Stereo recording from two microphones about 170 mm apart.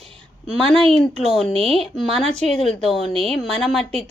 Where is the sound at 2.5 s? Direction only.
35° left (ahead or behind).